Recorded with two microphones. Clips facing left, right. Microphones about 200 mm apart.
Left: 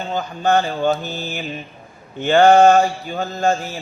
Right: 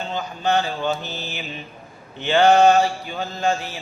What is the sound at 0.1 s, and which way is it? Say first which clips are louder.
A man's voice: left 4 dB; 50° left (ahead or behind).